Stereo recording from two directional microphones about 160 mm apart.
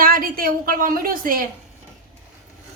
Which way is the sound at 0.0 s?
65° right (ahead or behind).